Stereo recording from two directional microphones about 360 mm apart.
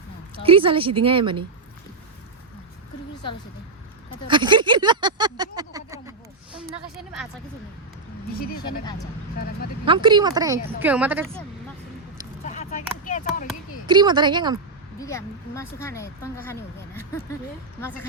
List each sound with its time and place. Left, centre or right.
0.4 s a woman's voice: centre
4.3 s a sound: centre
9.8 s a woman's voice: centre
13.1 s a sound: left
13.8 s a woman's voice: centre
14.9 s speech: centre